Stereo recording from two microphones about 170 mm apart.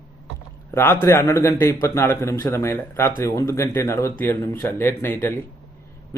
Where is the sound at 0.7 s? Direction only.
15° left (ahead or behind).